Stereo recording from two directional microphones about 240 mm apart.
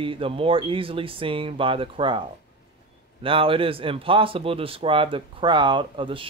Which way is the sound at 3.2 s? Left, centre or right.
Right.